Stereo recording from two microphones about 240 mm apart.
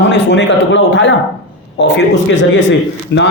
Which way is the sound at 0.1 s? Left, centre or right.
Left.